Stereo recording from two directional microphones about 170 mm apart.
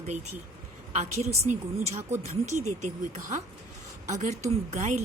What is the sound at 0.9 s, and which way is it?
A woman's voice, 40° right (ahead or behind).